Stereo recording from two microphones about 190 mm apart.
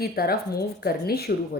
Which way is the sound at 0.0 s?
55° left (ahead or behind).